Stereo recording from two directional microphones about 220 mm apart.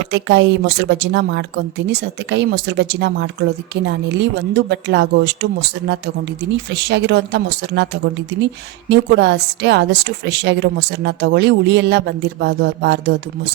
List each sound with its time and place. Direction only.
0.1 s a woman's voice: 50° right (ahead or behind)